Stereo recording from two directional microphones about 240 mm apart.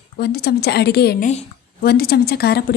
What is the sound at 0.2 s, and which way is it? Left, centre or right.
A woman's voice, left.